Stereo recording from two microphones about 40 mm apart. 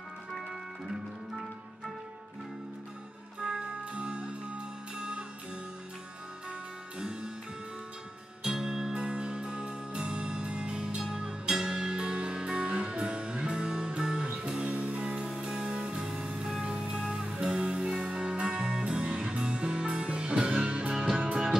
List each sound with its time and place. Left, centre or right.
3.3 s music: right
8.5 s music: centre
14.3 s music: right
15.2 s music: centre
20.9 s music: centre